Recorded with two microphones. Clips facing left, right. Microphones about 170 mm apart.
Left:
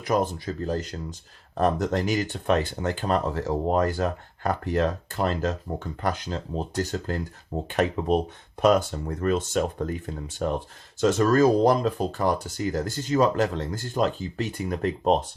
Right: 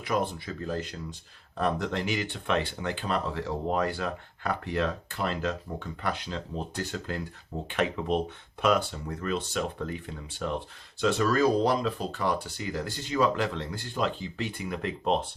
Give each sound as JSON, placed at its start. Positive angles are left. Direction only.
{"t": 0.0, "sound": "speech", "side_deg": 40}